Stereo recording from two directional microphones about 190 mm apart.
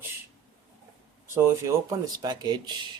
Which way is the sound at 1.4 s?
15° right (ahead or behind).